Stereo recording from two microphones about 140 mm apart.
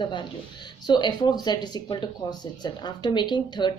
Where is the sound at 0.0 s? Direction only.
35° left (ahead or behind).